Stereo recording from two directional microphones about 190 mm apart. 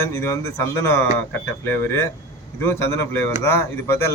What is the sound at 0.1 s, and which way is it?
Speech, 15° left (ahead or behind).